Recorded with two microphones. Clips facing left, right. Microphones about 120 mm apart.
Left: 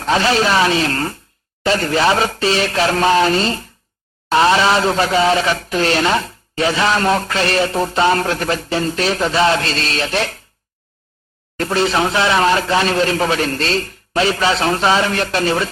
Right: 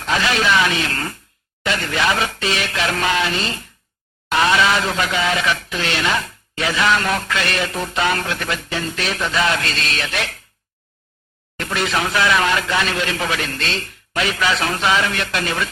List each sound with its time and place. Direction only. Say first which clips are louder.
0.0 s speech: left 4 dB; 35° left (ahead or behind)
11.5 s speech: left 5 dB; 35° left (ahead or behind)